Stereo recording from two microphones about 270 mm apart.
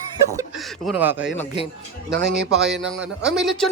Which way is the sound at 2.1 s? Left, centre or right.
Right.